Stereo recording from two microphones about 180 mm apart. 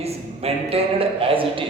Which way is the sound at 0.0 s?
35° right (ahead or behind).